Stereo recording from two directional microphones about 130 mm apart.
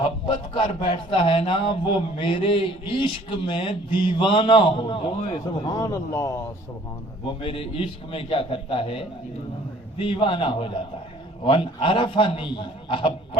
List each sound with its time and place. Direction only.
0.5 s a man's voice: 40° left (ahead or behind)
5.6 s speech: 25° left (ahead or behind)
7.4 s a man's voice: 45° left (ahead or behind)